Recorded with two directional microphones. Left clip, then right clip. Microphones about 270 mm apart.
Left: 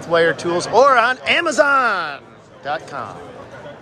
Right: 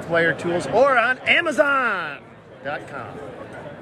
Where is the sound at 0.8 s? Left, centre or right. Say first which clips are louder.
Left 4 dB; left.